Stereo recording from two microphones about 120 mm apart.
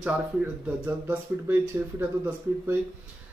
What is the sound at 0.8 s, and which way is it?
Speech, 15° right (ahead or behind).